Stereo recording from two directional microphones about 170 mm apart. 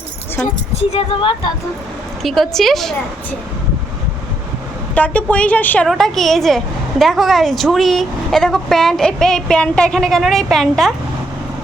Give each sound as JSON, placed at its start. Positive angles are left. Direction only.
{"t": 0.4, "sound": "a woman's voice", "side_deg": 40}
{"t": 2.2, "sound": "speech", "side_deg": 0}
{"t": 4.9, "sound": "a woman's voice", "side_deg": 10}